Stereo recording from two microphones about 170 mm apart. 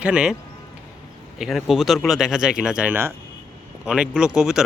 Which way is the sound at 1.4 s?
Centre (ahead or behind).